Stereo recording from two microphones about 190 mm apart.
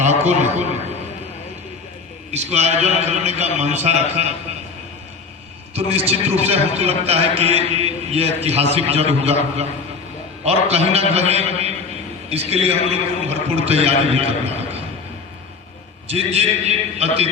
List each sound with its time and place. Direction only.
0.0 s a man's voice: 35° right (ahead or behind)
2.3 s a man's voice: 35° right (ahead or behind)
5.7 s a man's voice: 35° right (ahead or behind)
16.0 s a man's voice: 35° right (ahead or behind)